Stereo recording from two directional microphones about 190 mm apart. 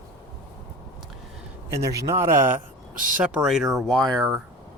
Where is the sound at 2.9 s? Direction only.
45° right (ahead or behind).